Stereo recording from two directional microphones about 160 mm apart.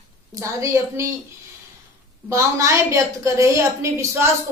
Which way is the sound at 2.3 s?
20° right (ahead or behind).